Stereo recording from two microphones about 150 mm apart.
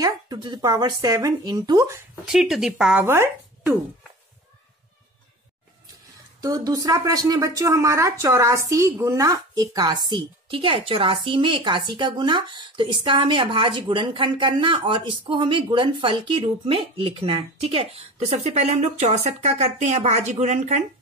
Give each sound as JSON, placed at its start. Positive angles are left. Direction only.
{"t": 0.0, "sound": "speech", "side_deg": -30}
{"t": 2.3, "sound": "speech", "side_deg": 0}
{"t": 6.4, "sound": "speech", "side_deg": -25}